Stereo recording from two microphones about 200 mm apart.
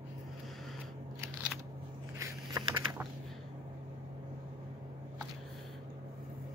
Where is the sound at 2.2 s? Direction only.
15° right (ahead or behind).